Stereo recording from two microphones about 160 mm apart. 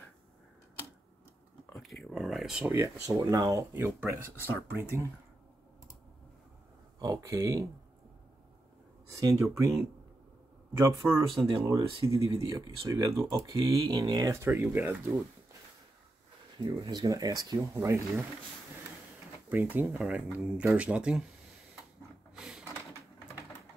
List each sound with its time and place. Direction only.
1.7 s a sound: centre (ahead or behind)
2.7 s speech: 20° right (ahead or behind)
7.0 s speech: 20° right (ahead or behind)
9.2 s speech: 20° right (ahead or behind)
10.9 s speech: 15° right (ahead or behind)
16.5 s speech: 25° right (ahead or behind)
19.5 s speech: 10° right (ahead or behind)
22.3 s a sound: 5° right (ahead or behind)